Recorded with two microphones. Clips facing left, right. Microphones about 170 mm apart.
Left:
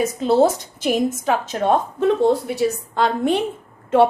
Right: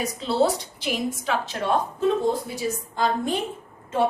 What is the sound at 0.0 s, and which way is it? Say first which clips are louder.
A woman's voice: left 6 dB; 50° left (ahead or behind).